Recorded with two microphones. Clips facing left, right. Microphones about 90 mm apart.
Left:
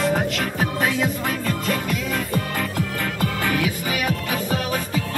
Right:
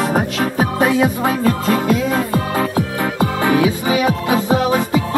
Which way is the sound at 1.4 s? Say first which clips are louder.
Right 9 dB; 55° right (ahead or behind).